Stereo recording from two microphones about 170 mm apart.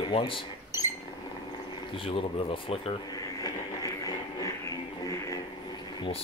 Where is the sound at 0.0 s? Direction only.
30° left (ahead or behind).